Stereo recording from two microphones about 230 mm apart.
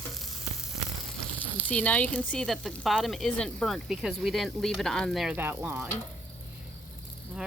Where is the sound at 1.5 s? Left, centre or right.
Centre.